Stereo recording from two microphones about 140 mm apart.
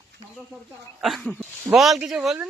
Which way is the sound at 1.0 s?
5° left (ahead or behind).